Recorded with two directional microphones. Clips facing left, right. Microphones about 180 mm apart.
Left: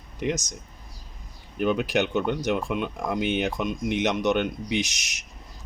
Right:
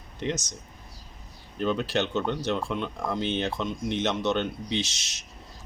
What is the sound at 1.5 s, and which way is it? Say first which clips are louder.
Speech: left 3 dB; 10° left (ahead or behind).